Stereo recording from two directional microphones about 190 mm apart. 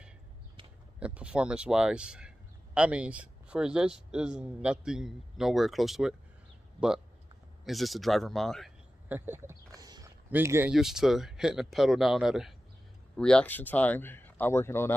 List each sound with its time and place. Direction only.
0.9 s speech: 5° right (ahead or behind)
7.6 s speech: centre (ahead or behind)
9.1 s speech: 10° right (ahead or behind)
9.8 s a sound: 20° right (ahead or behind)
10.3 s speech: 10° right (ahead or behind); by 15.0 s 10° left (ahead or behind)